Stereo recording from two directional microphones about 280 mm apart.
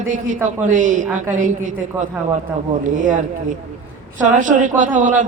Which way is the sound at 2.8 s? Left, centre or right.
Right.